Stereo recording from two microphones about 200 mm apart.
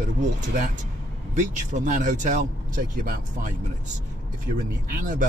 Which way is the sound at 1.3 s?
40° right (ahead or behind).